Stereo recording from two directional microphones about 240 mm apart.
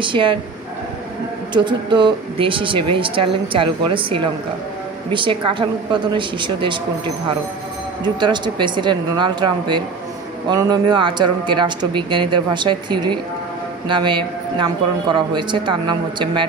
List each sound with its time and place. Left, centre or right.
0.0 s speech: right
1.5 s speech: centre
8.0 s speech: centre